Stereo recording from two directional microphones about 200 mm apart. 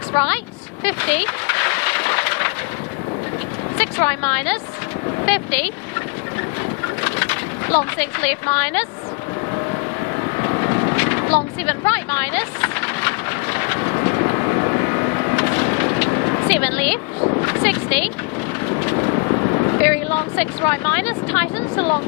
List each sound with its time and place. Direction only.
0.1 s speech: 10° left (ahead or behind)
0.9 s a sound: 10° left (ahead or behind)
3.8 s a woman's voice: 10° left (ahead or behind)
7.0 s vehicle: 10° left (ahead or behind)
7.9 s speech: 5° left (ahead or behind)
10.3 s vehicle: 20° left (ahead or behind)
16.5 s speech: 10° left (ahead or behind)
17.2 s a sound: 25° left (ahead or behind)
17.4 s bow-wow: 10° left (ahead or behind)
18.7 s vehicle: 20° left (ahead or behind)
19.8 s speech: 10° left (ahead or behind)